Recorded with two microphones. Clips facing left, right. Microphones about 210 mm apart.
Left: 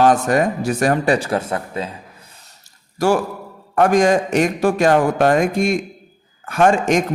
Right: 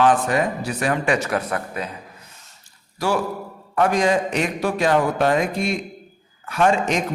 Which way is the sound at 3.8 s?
50° left (ahead or behind).